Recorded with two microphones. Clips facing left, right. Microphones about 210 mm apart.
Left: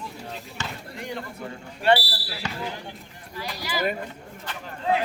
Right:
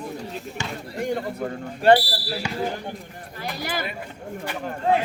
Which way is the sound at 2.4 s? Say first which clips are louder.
Even; 10° right (ahead or behind).